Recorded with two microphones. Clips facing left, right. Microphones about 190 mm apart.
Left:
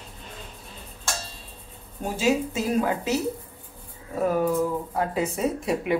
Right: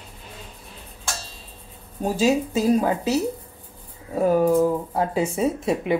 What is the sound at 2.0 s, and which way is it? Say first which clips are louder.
Speech: right 3 dB; 35° right (ahead or behind).